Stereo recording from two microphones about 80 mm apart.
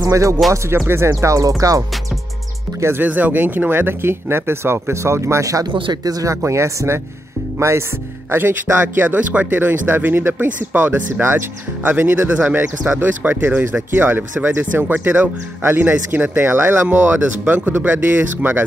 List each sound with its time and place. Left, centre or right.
0.1 s speech: right
0.7 s speech: right
1.6 s music: right
2.8 s speech: right
5.7 s speech: right
6.0 s music: right
6.4 s speech: right